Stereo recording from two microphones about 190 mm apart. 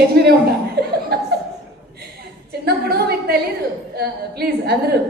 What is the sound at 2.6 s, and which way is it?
A woman's voice, 55° right (ahead or behind).